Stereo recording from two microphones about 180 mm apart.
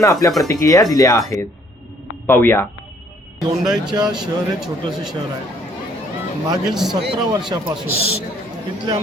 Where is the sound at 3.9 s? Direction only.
25° right (ahead or behind).